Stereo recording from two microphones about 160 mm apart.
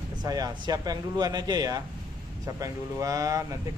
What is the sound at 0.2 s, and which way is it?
Speech, 25° right (ahead or behind).